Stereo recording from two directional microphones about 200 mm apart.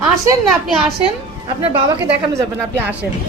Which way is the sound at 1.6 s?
25° right (ahead or behind).